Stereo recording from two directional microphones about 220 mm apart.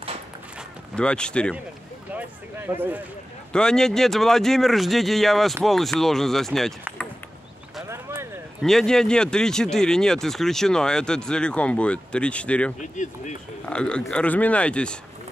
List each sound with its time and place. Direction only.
0.9 s speech: 5° left (ahead or behind)
2.1 s speech: 10° right (ahead or behind)
3.5 s speech: 5° left (ahead or behind)
7.9 s a sound: 10° right (ahead or behind)
8.6 s speech: centre (ahead or behind)
12.8 s speech: 35° left (ahead or behind)
13.7 s speech: 5° left (ahead or behind)